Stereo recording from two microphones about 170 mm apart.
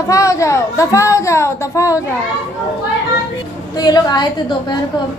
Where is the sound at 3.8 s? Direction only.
25° left (ahead or behind).